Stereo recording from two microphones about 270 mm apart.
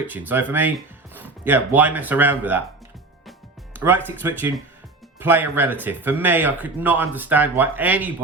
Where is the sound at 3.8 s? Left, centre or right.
Centre.